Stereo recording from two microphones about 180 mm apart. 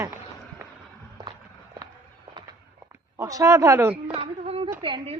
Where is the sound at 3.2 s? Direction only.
20° right (ahead or behind).